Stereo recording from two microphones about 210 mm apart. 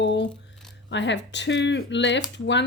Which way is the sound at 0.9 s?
60° left (ahead or behind).